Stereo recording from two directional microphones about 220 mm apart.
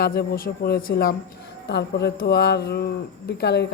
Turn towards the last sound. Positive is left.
turn(degrees=50)  # may be behind; listen again after turning